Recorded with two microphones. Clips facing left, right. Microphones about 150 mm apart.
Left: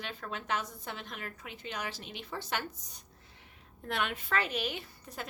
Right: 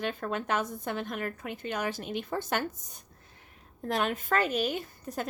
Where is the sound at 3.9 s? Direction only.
40° right (ahead or behind).